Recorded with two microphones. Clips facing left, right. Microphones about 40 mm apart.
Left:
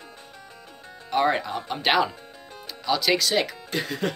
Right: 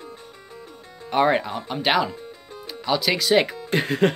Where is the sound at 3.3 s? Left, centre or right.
Right.